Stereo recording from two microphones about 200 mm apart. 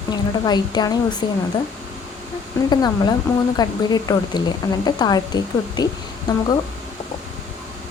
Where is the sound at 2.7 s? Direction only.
20° left (ahead or behind).